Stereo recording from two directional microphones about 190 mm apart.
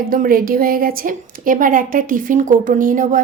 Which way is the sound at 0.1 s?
45° right (ahead or behind).